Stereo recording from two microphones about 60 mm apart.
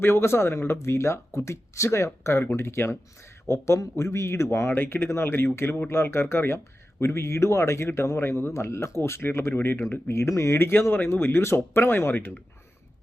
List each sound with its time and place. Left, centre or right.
0.0 s speech: left
9.9 s speech: left